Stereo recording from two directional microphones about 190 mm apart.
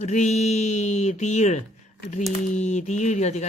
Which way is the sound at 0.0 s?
40° left (ahead or behind).